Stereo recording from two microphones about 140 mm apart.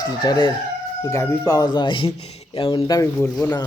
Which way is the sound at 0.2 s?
30° left (ahead or behind).